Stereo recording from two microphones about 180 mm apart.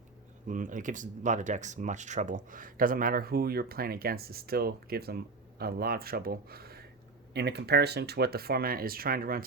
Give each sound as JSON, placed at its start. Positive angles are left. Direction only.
{"t": 0.4, "sound": "speech", "side_deg": -45}